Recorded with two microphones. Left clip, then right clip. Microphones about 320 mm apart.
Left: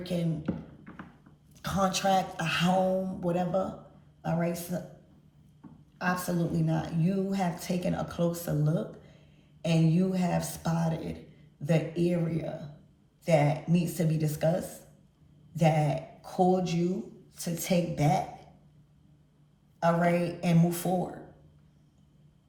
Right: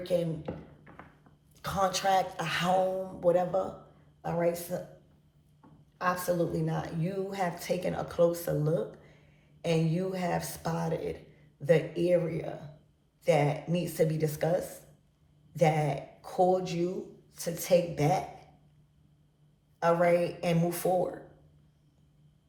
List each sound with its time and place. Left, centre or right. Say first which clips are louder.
0.0 s speech: right 5 dB; centre
1.5 s speech: even; centre
6.0 s speech: right 2 dB; centre
19.8 s speech: right 1 dB; centre